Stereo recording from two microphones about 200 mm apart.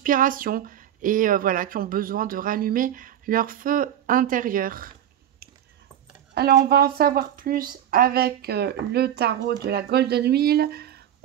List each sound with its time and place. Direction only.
0.0 s speech: 45° right (ahead or behind)
6.3 s speech: 55° right (ahead or behind)